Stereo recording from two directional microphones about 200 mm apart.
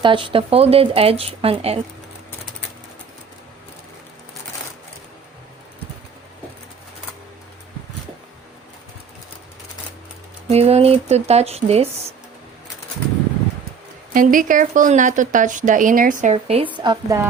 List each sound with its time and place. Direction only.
0.0 s speech: 25° right (ahead or behind)
10.5 s speech: 30° right (ahead or behind)
14.1 s speech: 40° right (ahead or behind)
16.3 s speech: 30° right (ahead or behind)